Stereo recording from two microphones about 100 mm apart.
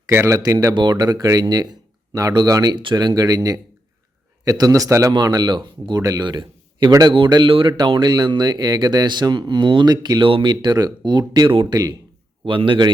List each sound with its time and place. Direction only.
0.1 s speech: 25° right (ahead or behind)
0.3 s speech: 35° right (ahead or behind)
0.7 s speech: 50° right (ahead or behind); by 5.1 s 30° right (ahead or behind)
5.1 s speech: 40° right (ahead or behind)
12.5 s a man's voice: 60° right (ahead or behind)